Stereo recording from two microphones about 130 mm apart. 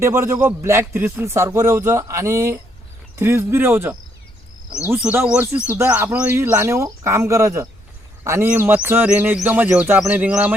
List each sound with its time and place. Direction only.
0.0 s speech: 20° right (ahead or behind)